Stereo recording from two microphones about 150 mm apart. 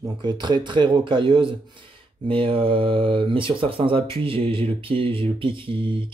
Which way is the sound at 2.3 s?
35° right (ahead or behind).